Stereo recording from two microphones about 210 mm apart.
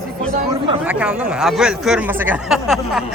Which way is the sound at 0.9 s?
5° right (ahead or behind).